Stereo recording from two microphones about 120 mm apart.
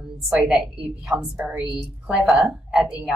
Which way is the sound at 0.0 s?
10° right (ahead or behind).